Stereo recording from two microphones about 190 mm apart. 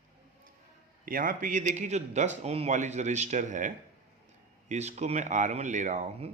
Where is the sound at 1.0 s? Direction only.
45° right (ahead or behind).